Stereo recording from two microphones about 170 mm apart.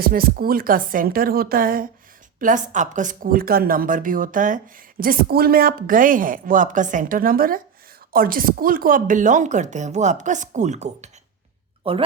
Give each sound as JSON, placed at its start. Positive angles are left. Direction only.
{"t": 0.0, "sound": "a woman's voice", "side_deg": -60}